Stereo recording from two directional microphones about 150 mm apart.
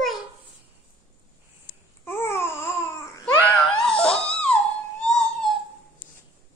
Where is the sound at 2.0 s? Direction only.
15° left (ahead or behind).